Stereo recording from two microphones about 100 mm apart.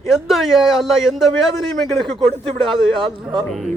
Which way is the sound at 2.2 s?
60° right (ahead or behind).